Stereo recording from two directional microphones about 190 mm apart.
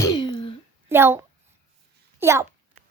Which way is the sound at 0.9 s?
10° right (ahead or behind).